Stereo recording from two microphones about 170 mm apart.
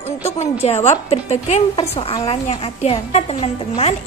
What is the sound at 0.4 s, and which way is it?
A woman's voice, 40° left (ahead or behind).